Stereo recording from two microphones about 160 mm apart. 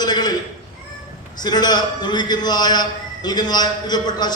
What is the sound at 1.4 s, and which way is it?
A man's voice, 25° left (ahead or behind).